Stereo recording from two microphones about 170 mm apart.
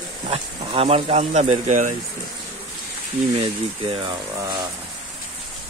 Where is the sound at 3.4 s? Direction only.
30° right (ahead or behind).